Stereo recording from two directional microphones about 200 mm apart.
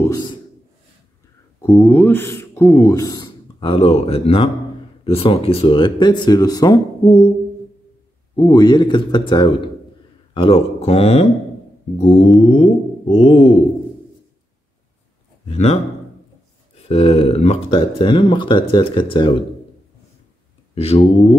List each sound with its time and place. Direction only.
1.6 s speech: 10° left (ahead or behind)
8.4 s speech: 20° left (ahead or behind)
15.4 s a man's voice: 30° left (ahead or behind)
16.9 s speech: 30° left (ahead or behind)
20.7 s speech: 30° left (ahead or behind)